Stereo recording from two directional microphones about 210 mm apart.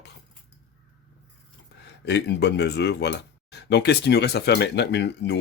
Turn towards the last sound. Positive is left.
turn(degrees=55)  # may be behind; listen again after turning